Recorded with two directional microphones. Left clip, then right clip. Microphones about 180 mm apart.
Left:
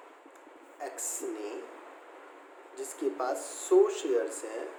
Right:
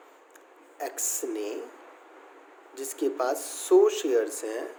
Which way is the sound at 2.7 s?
50° right (ahead or behind).